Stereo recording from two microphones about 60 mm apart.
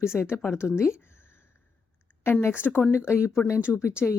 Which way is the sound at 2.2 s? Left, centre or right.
Left.